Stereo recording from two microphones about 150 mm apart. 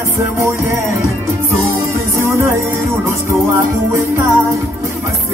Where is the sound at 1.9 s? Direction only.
15° right (ahead or behind).